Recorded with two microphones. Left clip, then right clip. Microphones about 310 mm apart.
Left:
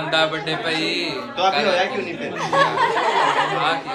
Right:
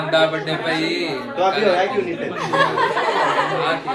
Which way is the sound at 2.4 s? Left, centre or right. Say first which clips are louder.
Even; left.